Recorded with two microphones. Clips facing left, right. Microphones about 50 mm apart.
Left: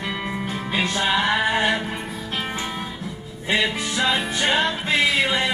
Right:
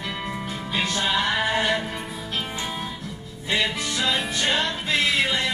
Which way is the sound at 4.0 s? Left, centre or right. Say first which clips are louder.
Left 3 dB; centre.